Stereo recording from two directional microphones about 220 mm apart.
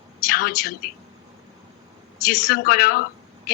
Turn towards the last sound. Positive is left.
turn(degrees=40)  # may be behind; listen again after turning